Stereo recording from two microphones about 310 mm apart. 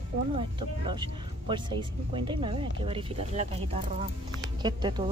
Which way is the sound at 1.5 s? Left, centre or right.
Centre.